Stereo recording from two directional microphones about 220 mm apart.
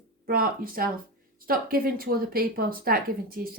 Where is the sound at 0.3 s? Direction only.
40° right (ahead or behind).